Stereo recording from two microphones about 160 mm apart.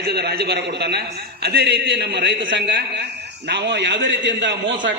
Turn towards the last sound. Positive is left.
turn(degrees=-90)